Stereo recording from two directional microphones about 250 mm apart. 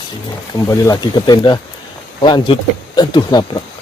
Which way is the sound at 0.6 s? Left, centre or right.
Centre.